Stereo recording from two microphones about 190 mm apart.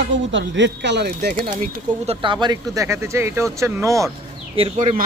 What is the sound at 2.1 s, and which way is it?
Speech, 25° right (ahead or behind).